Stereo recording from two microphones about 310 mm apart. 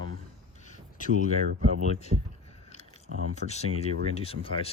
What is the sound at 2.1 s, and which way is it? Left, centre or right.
Speech, right.